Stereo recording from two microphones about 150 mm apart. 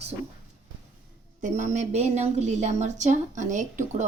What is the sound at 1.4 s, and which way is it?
A woman's voice, 55° right (ahead or behind).